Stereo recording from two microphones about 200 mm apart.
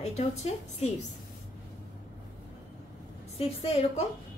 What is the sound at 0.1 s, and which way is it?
Speech, 35° left (ahead or behind).